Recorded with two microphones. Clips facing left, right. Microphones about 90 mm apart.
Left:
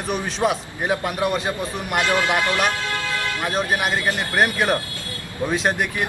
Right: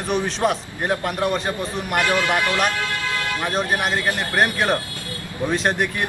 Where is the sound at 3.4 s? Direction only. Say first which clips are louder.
Even; 5° left (ahead or behind).